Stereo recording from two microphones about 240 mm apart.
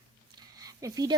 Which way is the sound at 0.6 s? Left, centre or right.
Centre.